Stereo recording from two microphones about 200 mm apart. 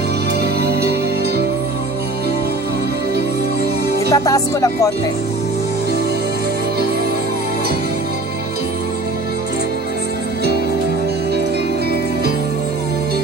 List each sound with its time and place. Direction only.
0.6 s music: 55° right (ahead or behind)
4.1 s speech: 15° left (ahead or behind)